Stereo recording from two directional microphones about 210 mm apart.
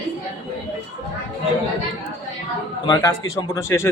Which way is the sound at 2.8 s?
15° left (ahead or behind).